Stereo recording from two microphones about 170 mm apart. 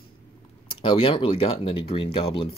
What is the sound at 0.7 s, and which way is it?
Speech, 30° left (ahead or behind).